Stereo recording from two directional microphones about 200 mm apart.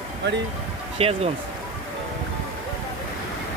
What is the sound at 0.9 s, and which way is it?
Speech, 30° right (ahead or behind).